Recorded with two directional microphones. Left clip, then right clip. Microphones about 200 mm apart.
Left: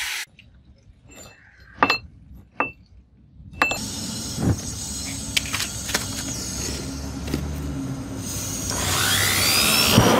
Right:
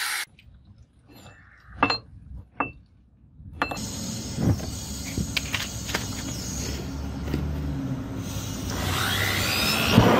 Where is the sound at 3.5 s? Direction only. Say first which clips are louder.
Left 7 dB; 10° left (ahead or behind).